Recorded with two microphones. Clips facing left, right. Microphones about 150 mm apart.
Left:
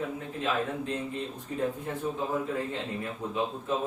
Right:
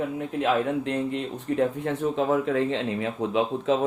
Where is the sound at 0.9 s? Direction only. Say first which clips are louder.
Right 6 dB; 75° right (ahead or behind).